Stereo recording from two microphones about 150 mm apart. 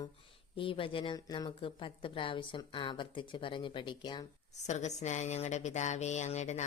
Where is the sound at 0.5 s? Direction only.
35° left (ahead or behind).